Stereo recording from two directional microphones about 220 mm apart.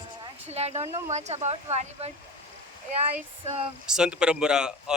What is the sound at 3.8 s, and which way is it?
Speech, 5° right (ahead or behind).